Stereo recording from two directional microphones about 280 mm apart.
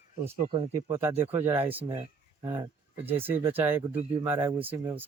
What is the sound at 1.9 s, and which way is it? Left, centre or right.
Speech, centre.